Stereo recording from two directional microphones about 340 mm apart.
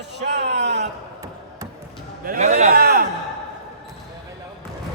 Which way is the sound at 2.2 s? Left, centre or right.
Right.